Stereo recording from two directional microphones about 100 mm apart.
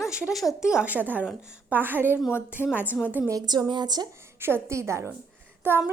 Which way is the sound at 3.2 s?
40° right (ahead or behind).